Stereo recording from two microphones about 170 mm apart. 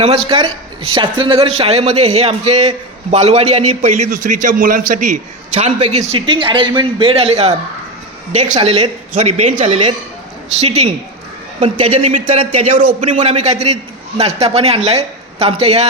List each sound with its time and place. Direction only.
0.0 s a man's voice: 35° right (ahead or behind)
9.1 s a man's voice: 40° right (ahead or behind)
12.7 s a man's voice: 50° right (ahead or behind)